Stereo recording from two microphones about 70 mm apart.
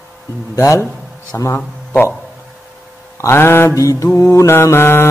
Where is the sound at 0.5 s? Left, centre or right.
Left.